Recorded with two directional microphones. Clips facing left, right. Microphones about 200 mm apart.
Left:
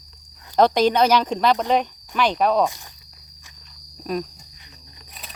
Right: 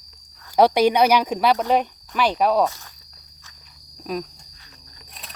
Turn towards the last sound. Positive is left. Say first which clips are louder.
# left 1 dB
turn(degrees=0)  # may be behind; listen again after turning